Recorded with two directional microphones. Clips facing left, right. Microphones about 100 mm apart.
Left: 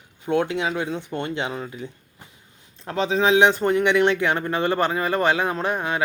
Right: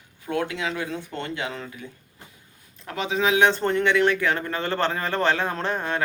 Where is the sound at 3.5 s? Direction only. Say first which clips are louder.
Left 2 dB; 10° left (ahead or behind).